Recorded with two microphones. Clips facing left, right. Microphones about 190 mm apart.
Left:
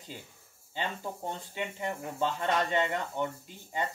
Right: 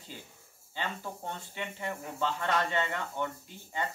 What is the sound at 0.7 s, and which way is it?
Speech, 15° left (ahead or behind).